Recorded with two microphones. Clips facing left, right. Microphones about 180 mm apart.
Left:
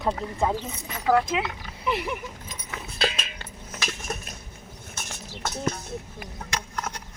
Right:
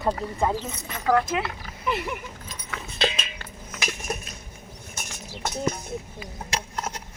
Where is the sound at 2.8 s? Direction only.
5° left (ahead or behind).